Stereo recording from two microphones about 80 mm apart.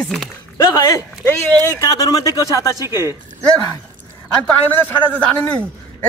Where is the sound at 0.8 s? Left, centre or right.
Left.